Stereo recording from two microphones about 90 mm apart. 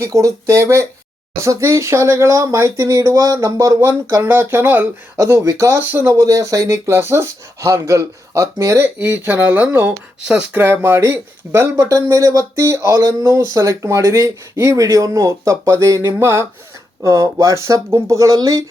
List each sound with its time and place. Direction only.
0.0 s speech: 35° right (ahead or behind)
3.7 s speech: 25° right (ahead or behind)
5.1 s speech: 35° right (ahead or behind)
5.8 s speech: 25° right (ahead or behind)
6.1 s speech: 40° right (ahead or behind)
9.0 s speech: 20° right (ahead or behind)
10.6 s speech: 25° right (ahead or behind); by 18.6 s 45° right (ahead or behind)